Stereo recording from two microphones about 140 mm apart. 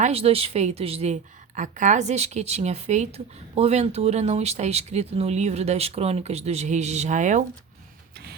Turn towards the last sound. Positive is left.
turn(degrees=-60)  # may be behind; listen again after turning